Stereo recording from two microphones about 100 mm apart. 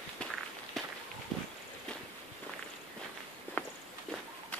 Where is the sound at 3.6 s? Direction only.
20° left (ahead or behind).